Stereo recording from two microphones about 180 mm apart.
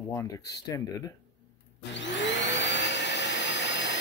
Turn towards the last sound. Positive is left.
turn(degrees=80)